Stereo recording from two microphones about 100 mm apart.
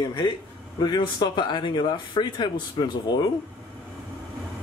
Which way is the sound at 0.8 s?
45° left (ahead or behind).